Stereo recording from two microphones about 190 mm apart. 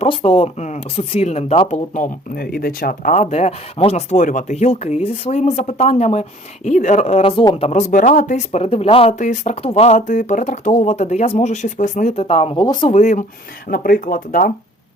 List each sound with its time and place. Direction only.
0.0 s speech: 30° left (ahead or behind)
12.9 s speech: 40° left (ahead or behind)